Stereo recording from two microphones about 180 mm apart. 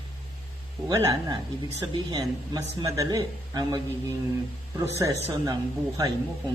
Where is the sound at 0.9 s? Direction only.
20° right (ahead or behind).